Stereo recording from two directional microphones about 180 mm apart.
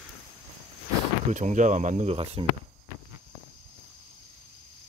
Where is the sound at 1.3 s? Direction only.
40° right (ahead or behind).